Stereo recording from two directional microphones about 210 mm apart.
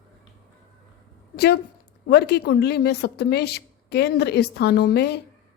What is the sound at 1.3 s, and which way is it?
A woman's voice, 50° left (ahead or behind).